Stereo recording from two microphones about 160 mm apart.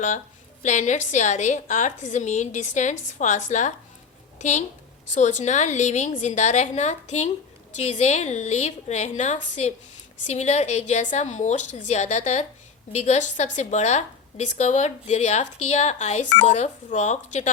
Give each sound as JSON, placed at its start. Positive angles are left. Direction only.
{"t": 0.6, "sound": "a woman's voice", "side_deg": 50}